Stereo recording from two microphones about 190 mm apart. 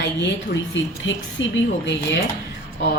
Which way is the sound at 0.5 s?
75° left (ahead or behind).